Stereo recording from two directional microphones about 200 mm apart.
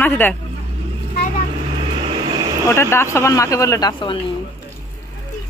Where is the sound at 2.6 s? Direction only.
15° left (ahead or behind).